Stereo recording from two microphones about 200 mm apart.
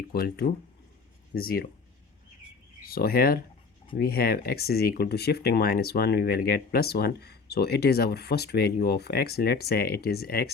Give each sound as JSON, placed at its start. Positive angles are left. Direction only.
{"t": 0.1, "sound": "speech", "side_deg": 50}
{"t": 2.8, "sound": "speech", "side_deg": 50}